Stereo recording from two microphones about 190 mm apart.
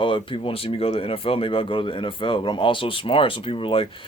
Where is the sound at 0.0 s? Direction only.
25° left (ahead or behind).